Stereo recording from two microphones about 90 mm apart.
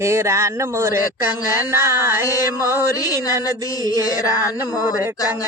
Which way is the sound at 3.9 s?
40° left (ahead or behind).